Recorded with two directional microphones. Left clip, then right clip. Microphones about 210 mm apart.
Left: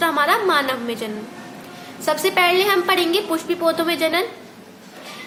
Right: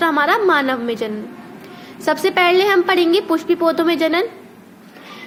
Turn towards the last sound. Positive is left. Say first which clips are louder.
# right 3 dB
turn(degrees=-30)  # may be behind; listen again after turning